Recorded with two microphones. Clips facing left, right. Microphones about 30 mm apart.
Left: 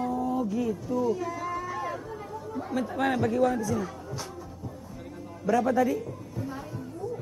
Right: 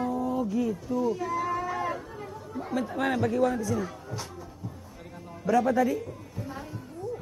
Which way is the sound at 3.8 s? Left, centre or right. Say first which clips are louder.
Even; centre.